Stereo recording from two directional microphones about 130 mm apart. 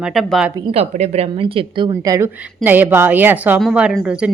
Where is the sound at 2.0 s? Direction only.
25° right (ahead or behind).